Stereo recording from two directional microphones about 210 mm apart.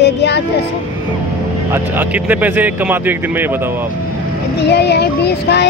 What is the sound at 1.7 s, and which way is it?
Speech, 10° right (ahead or behind).